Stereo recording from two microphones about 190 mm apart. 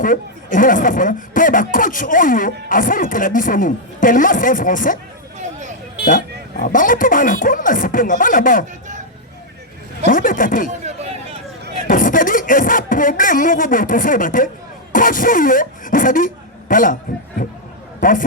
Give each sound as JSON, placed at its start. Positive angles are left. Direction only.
{"t": 0.0, "sound": "speech", "side_deg": 45}
{"t": 6.6, "sound": "speech", "side_deg": 45}
{"t": 10.1, "sound": "speech", "side_deg": 45}
{"t": 10.8, "sound": "a sound", "side_deg": -35}
{"t": 11.9, "sound": "beatboxing", "side_deg": 45}
{"t": 14.9, "sound": "speech", "side_deg": 45}
{"t": 18.0, "sound": "speech", "side_deg": 45}